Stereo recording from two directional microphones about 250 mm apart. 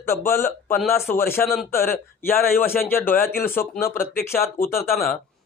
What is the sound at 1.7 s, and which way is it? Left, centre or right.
Speech, left.